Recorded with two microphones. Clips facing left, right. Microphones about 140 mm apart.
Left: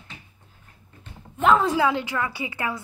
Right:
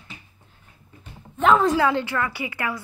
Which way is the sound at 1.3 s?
5° left (ahead or behind).